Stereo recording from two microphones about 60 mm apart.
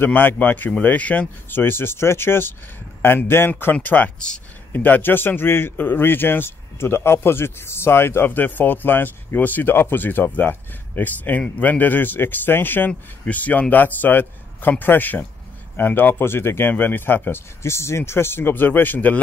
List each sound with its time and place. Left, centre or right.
0.0 s a man's voice: left
1.5 s a man's voice: left
17.6 s a man's voice: left